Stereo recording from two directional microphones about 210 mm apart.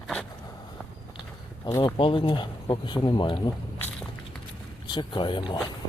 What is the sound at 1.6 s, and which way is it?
Speech, 20° left (ahead or behind).